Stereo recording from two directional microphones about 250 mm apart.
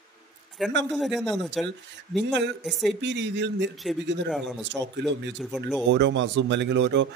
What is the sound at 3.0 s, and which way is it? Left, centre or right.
Speech, right.